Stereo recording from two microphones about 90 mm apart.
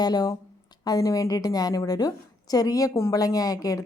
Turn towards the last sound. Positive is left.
turn(degrees=40)  # may be behind; listen again after turning